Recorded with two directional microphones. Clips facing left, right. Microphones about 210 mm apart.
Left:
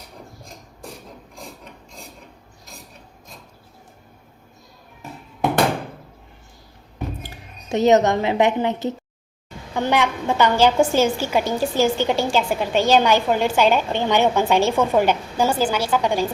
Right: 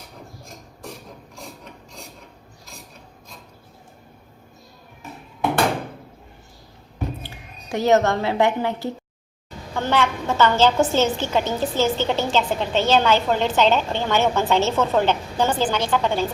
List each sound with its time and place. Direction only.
7.7 s a woman's voice: 20° left (ahead or behind)